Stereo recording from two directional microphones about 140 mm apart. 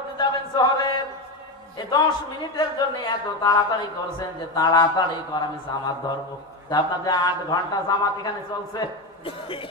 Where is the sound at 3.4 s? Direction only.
30° left (ahead or behind).